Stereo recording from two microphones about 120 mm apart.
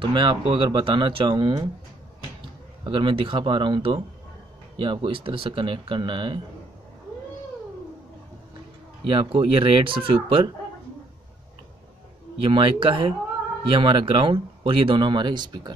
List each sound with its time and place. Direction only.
0.0 s speech: 40° right (ahead or behind)
2.8 s speech: 45° right (ahead or behind)
9.0 s speech: 50° right (ahead or behind)
12.4 s speech: 45° right (ahead or behind)